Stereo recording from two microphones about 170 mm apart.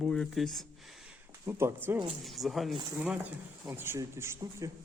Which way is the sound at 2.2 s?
Centre (ahead or behind).